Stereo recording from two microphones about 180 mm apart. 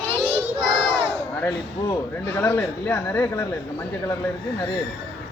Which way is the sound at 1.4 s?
10° left (ahead or behind).